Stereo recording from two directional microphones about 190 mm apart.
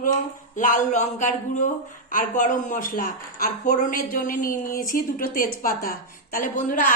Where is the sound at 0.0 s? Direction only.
40° left (ahead or behind).